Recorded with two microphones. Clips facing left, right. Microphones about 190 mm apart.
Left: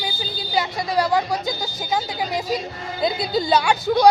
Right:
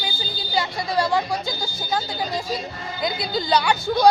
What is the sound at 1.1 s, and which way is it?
A woman's voice, 15° left (ahead or behind).